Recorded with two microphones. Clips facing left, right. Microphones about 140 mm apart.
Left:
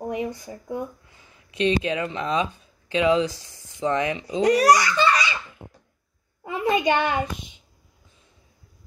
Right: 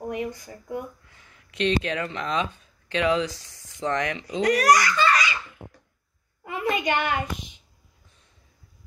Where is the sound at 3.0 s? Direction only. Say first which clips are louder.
Left 3 dB; 25° left (ahead or behind).